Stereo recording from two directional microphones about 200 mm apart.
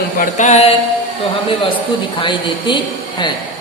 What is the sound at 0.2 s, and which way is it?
Speech, 40° left (ahead or behind).